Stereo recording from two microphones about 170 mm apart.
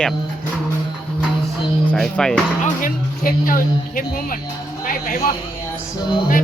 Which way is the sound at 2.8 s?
55° left (ahead or behind).